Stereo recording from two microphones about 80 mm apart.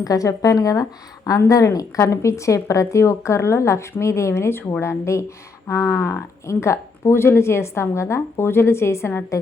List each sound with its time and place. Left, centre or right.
0.0 s a woman's voice: left